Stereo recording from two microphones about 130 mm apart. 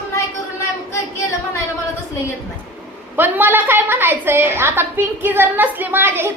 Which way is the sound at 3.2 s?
15° right (ahead or behind).